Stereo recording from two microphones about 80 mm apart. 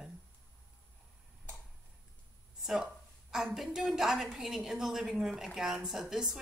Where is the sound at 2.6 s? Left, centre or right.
Centre.